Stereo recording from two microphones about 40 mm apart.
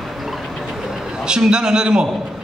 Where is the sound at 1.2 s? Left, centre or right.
Centre.